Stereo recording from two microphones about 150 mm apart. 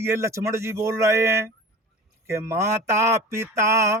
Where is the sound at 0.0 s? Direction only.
15° right (ahead or behind).